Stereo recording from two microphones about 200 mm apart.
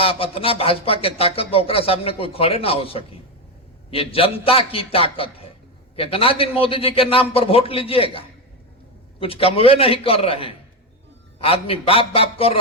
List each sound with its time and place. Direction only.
0.0 s speech: 30° left (ahead or behind)
9.2 s speech: 30° left (ahead or behind)